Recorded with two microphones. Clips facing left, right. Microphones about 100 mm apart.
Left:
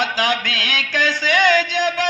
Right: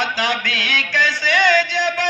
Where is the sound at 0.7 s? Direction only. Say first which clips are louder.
Right 1 dB; 45° left (ahead or behind).